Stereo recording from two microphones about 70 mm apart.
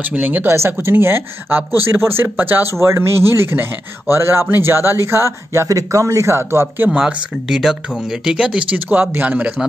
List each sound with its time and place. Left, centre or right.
0.0 s speech: right
6.9 s speech: centre
8.7 s speech: right